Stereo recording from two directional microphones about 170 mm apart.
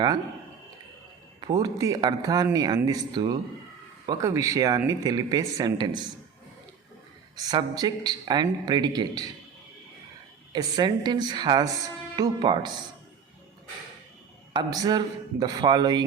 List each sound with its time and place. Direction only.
1.4 s speech: 25° right (ahead or behind)
7.3 s speech: 20° right (ahead or behind)
10.5 s speech: 25° right (ahead or behind)
14.5 s speech: 25° right (ahead or behind)